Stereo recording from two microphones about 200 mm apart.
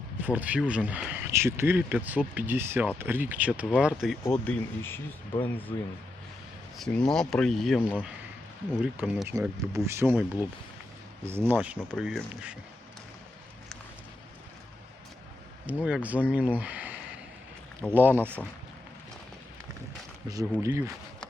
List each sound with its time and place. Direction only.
0.2 s speech: 10° right (ahead or behind); by 5.7 s 10° left (ahead or behind)
7.1 s speech: centre (ahead or behind)
8.8 s speech: 5° right (ahead or behind)
11.3 s speech: 10° right (ahead or behind)
15.6 s speech: 5° right (ahead or behind)
20.2 s speech: 15° right (ahead or behind)